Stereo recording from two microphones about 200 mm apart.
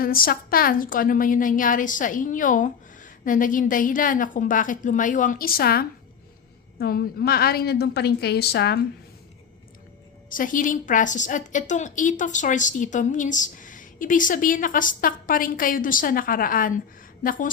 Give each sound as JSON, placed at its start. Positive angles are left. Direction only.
{"t": 0.0, "sound": "a woman's voice", "side_deg": 45}
{"t": 10.2, "sound": "a woman's voice", "side_deg": 45}